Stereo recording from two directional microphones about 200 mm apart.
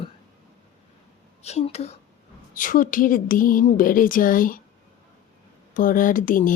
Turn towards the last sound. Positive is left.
turn(degrees=45)  # may be behind; listen again after turning